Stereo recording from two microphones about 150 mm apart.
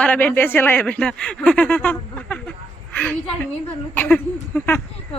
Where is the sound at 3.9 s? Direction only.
15° left (ahead or behind).